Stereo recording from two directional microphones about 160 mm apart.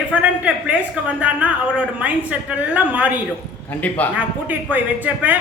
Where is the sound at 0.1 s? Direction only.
10° right (ahead or behind).